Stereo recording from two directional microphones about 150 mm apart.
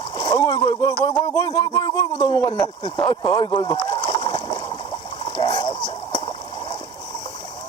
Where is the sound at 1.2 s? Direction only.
20° left (ahead or behind).